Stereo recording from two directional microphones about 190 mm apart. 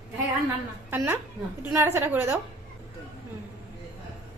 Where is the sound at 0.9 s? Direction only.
10° right (ahead or behind).